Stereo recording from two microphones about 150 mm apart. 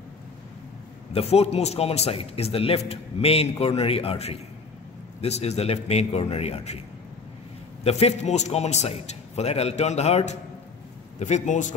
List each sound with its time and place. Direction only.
1.1 s a man's voice: 45° left (ahead or behind)
7.8 s a man's voice: 45° left (ahead or behind)